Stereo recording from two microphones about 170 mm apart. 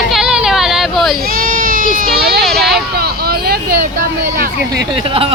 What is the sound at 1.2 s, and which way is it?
Baby cry, 55° right (ahead or behind).